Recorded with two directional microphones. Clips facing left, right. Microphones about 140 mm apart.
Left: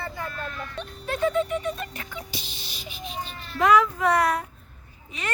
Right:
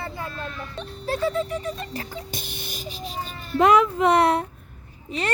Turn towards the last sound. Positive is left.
turn(degrees=-30)  # may be behind; listen again after turning